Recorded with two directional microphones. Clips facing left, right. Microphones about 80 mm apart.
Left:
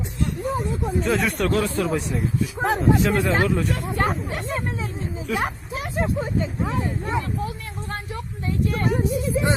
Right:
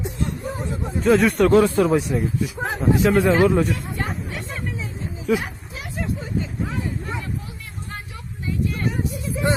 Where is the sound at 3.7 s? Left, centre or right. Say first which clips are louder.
Left 4 dB; left.